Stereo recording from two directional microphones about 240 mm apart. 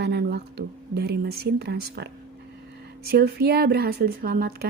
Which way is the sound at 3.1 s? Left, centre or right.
Right.